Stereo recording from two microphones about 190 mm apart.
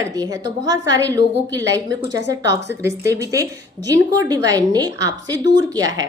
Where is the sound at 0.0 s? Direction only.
20° right (ahead or behind).